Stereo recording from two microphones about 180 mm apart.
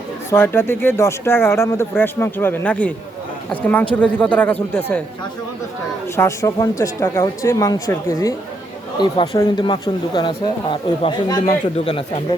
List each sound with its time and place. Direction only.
0.3 s speech: 10° left (ahead or behind)
6.1 s speech: 15° left (ahead or behind)
9.0 s speech: 30° left (ahead or behind)